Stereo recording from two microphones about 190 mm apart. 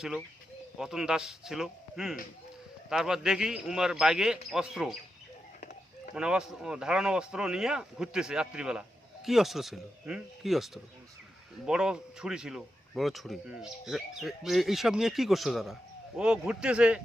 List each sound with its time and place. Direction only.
0.8 s speech: 5° right (ahead or behind)
6.1 s speech: 5° right (ahead or behind)